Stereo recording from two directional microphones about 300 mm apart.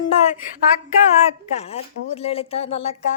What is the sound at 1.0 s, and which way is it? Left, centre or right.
Speech, left.